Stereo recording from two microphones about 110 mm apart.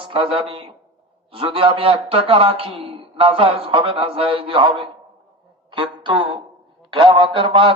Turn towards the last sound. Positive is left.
turn(degrees=-50)  # may be behind; listen again after turning